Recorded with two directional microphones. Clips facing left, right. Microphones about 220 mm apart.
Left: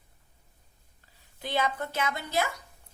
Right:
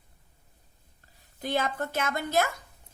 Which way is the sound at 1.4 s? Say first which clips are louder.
Right 1 dB; 45° right (ahead or behind).